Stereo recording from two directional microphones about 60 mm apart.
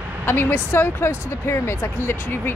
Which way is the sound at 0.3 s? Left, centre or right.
Left.